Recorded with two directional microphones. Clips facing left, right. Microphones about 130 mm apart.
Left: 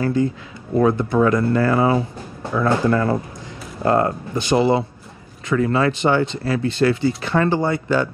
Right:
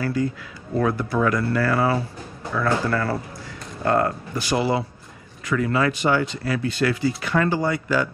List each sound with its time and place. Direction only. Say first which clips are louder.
0.0 s speech: left 4 dB; 25° left (ahead or behind)